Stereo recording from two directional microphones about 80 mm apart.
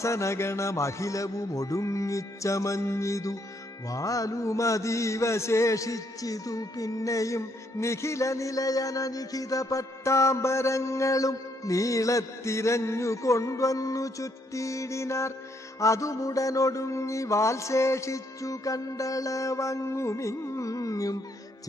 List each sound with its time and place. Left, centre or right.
0.0 s mantra: left